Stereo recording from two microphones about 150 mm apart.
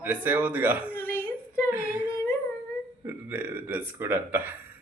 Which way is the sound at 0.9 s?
15° left (ahead or behind).